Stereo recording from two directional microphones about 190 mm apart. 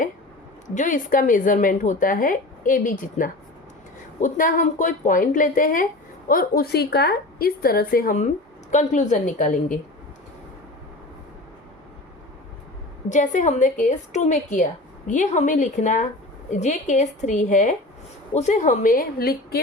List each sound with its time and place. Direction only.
0.7 s a woman's voice: 40° left (ahead or behind)
13.1 s a woman's voice: 40° left (ahead or behind)